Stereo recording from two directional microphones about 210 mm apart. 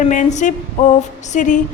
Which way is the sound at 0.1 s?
35° left (ahead or behind).